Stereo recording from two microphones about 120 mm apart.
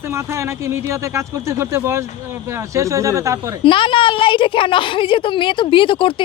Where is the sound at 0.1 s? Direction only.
25° right (ahead or behind).